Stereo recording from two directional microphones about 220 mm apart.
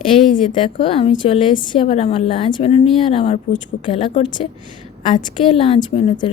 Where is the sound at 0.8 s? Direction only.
25° left (ahead or behind).